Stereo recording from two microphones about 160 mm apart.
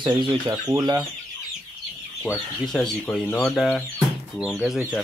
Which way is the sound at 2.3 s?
Centre (ahead or behind).